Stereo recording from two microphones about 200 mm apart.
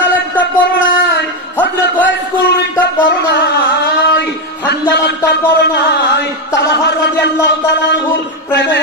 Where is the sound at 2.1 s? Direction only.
65° left (ahead or behind).